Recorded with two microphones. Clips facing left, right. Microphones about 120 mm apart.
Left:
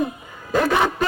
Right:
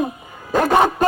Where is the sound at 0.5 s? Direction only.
40° right (ahead or behind).